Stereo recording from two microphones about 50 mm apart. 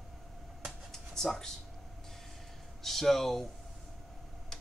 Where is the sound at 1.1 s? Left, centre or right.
Centre.